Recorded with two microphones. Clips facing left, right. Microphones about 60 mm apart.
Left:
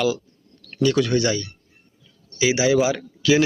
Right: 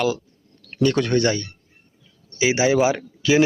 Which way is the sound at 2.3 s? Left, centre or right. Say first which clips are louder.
Even; right.